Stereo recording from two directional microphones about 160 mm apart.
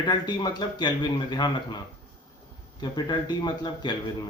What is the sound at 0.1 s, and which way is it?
Speech, 25° left (ahead or behind).